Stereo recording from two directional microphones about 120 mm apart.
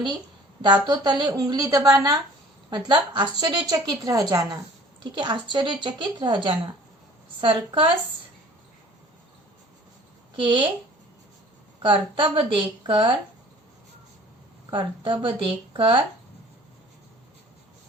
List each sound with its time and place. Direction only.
0.6 s a woman's voice: 35° right (ahead or behind)
10.3 s a woman's voice: 40° right (ahead or behind)
11.8 s a woman's voice: 45° right (ahead or behind)
14.7 s a woman's voice: 45° right (ahead or behind)